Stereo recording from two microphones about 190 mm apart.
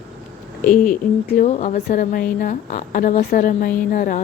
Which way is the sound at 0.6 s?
45° left (ahead or behind).